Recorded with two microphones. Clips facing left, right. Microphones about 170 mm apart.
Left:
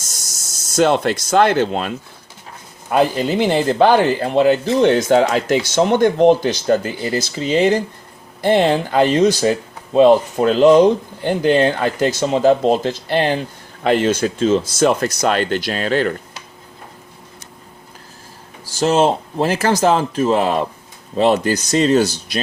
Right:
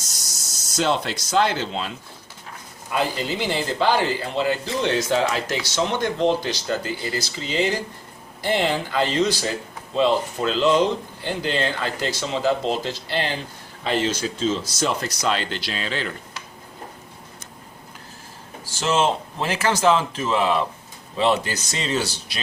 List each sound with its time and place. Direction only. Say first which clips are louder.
0.8 s speech: left 8 dB; 55° left (ahead or behind)
2.9 s speech: left 8 dB; 55° left (ahead or behind)
18.8 s speech: left 6 dB; 40° left (ahead or behind)